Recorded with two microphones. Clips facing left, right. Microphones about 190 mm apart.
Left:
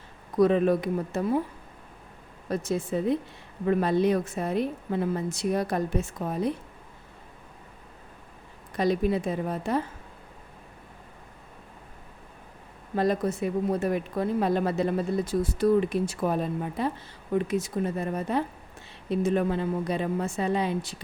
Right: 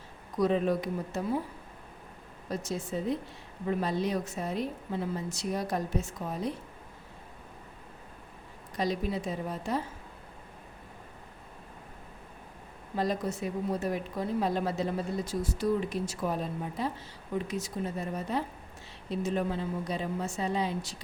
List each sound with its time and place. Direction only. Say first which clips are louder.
0.3 s speech: left 6 dB; 60° left (ahead or behind)
2.5 s speech: left 6 dB; 60° left (ahead or behind)
8.7 s speech: left 6 dB; 60° left (ahead or behind)
13.0 s speech: left 5 dB; 55° left (ahead or behind)